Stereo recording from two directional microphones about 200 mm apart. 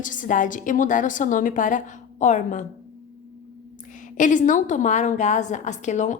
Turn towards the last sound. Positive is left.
turn(degrees=35)  # may be behind; listen again after turning